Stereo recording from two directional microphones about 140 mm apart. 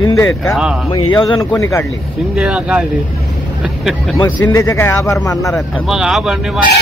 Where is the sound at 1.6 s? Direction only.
20° left (ahead or behind).